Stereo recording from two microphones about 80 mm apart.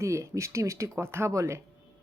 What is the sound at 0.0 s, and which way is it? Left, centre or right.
Speech, right.